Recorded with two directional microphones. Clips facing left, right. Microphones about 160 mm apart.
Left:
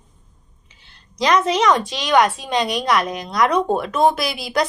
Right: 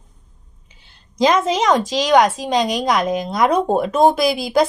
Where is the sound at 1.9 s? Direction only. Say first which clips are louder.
Right 3 dB; 90° right.